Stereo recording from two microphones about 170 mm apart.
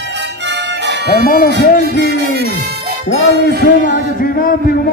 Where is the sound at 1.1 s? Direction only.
65° left (ahead or behind).